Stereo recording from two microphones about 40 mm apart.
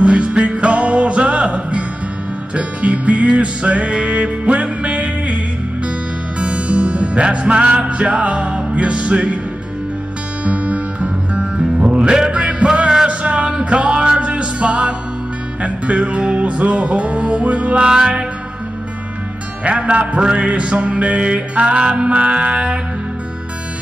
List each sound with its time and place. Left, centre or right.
0.0 s music: right
6.4 s music: right
10.4 s music: right
12.6 s music: right
17.8 s music: right
19.6 s music: right